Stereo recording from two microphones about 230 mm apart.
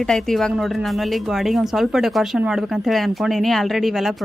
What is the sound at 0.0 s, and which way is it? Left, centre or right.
Speech, centre.